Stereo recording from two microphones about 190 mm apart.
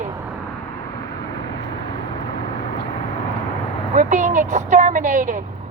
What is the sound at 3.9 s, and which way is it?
A man's voice, 40° right (ahead or behind).